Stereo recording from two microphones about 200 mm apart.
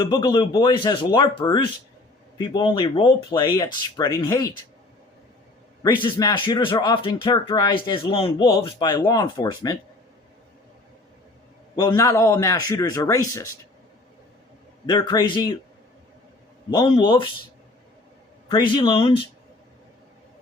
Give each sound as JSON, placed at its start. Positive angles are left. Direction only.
{"t": 0.0, "sound": "speech", "side_deg": 20}
{"t": 5.8, "sound": "speech", "side_deg": 20}
{"t": 11.8, "sound": "speech", "side_deg": 20}
{"t": 14.8, "sound": "speech", "side_deg": 20}
{"t": 16.7, "sound": "speech", "side_deg": 20}
{"t": 18.4, "sound": "speech", "side_deg": 20}